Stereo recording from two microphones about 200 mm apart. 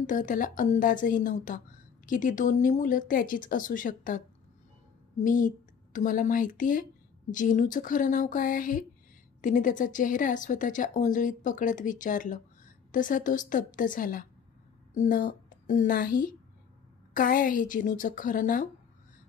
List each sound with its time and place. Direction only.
0.0 s a woman's voice: 40° left (ahead or behind)
5.2 s a woman's voice: 40° left (ahead or behind)